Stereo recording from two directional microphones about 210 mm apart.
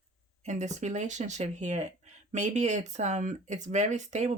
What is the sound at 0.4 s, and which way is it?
Speech, 35° right (ahead or behind).